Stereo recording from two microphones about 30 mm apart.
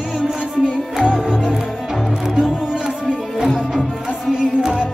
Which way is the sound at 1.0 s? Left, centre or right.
Right.